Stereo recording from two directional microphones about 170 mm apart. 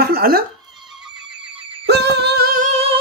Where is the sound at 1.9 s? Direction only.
75° right (ahead or behind).